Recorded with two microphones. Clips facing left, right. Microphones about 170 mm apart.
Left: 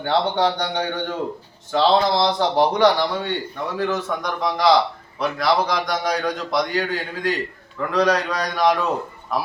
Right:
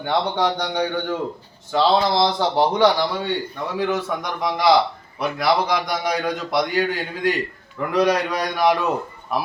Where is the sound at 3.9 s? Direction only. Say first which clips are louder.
Even; 10° right (ahead or behind).